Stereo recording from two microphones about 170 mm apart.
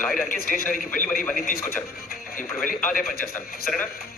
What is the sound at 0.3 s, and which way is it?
Speech, 55° left (ahead or behind).